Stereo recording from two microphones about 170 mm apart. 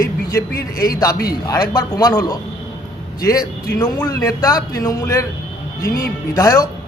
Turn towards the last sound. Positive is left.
turn(degrees=20)  # may be behind; listen again after turning